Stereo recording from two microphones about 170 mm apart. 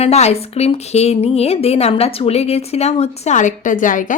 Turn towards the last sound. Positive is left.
turn(degrees=50)  # may be behind; listen again after turning